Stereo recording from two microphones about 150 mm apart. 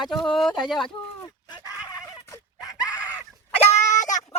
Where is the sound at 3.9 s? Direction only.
55° left (ahead or behind).